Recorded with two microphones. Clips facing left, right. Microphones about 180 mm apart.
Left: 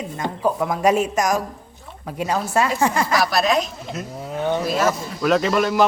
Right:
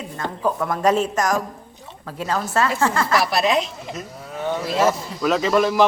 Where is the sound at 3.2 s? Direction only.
25° right (ahead or behind).